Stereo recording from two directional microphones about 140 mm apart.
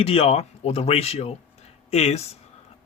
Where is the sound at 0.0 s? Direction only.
45° left (ahead or behind).